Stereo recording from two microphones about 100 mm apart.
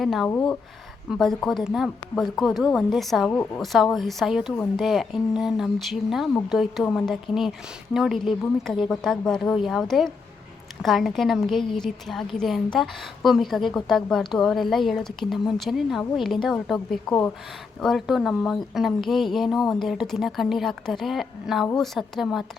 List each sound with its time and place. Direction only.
0.0 s a woman's voice: centre (ahead or behind)
3.2 s a woman's voice: 20° left (ahead or behind)
3.6 s a woman's voice: centre (ahead or behind)